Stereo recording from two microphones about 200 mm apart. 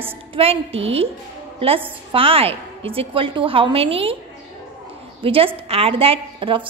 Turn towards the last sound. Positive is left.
turn(degrees=-25)  # may be behind; listen again after turning